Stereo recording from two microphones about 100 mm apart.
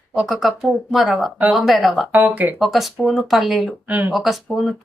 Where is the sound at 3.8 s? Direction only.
15° right (ahead or behind).